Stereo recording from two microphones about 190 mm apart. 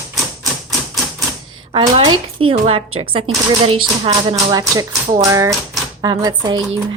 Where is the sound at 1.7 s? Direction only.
25° right (ahead or behind).